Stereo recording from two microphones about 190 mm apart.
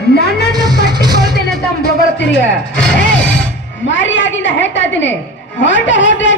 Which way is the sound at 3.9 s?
75° left (ahead or behind).